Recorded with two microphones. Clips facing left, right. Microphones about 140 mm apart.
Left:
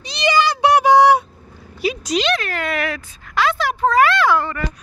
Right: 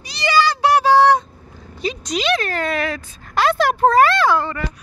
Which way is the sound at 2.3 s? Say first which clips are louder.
Right 2 dB; 35° right (ahead or behind).